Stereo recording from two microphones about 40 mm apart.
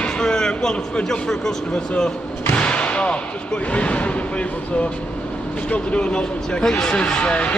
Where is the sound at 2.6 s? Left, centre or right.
Left.